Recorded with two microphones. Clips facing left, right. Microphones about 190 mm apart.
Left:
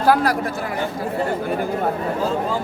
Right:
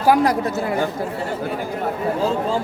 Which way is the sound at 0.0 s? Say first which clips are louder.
Right 1 dB; 15° right (ahead or behind).